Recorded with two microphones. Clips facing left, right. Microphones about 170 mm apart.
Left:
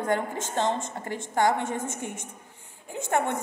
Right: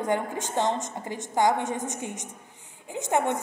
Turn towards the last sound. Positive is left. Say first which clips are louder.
# right 1 dB
turn(degrees=-15)  # may be behind; listen again after turning